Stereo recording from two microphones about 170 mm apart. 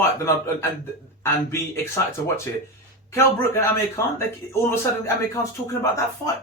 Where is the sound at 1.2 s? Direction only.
15° left (ahead or behind).